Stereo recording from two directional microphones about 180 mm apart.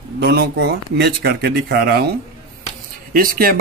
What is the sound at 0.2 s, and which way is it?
Speech, 65° right (ahead or behind).